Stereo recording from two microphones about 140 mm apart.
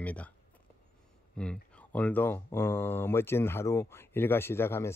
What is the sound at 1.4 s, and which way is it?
Speech, 10° left (ahead or behind).